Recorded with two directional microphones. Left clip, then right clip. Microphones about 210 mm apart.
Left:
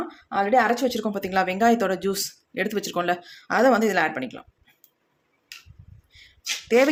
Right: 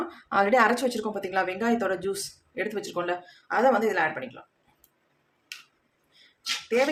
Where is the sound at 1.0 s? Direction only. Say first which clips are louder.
Left 3 dB; 35° left (ahead or behind).